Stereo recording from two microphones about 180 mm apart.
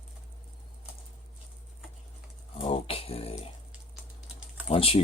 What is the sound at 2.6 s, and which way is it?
Speech, 30° left (ahead or behind).